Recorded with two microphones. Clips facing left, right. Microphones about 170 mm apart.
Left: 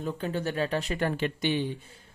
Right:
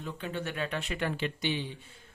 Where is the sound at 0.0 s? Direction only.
40° left (ahead or behind).